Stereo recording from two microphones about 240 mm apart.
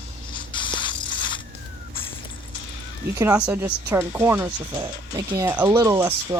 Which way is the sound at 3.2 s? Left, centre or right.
Centre.